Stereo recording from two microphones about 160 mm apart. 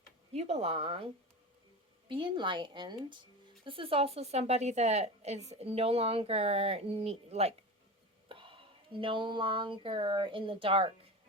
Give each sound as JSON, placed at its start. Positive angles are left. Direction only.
{"t": 0.3, "sound": "a woman's voice", "side_deg": -40}
{"t": 2.0, "sound": "a woman's voice", "side_deg": -30}